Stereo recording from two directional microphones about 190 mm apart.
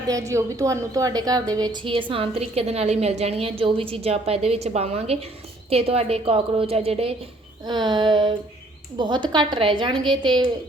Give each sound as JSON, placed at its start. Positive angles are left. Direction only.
{"t": 0.1, "sound": "a woman's voice", "side_deg": -15}